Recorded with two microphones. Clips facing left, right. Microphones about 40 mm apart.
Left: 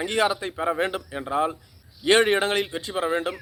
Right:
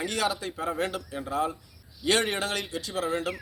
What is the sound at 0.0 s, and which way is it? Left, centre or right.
A man's voice, left.